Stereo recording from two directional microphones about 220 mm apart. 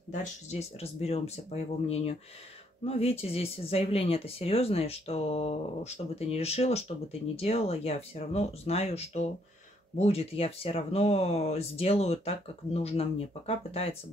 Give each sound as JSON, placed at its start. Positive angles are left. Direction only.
{"t": 0.1, "sound": "speech", "side_deg": 30}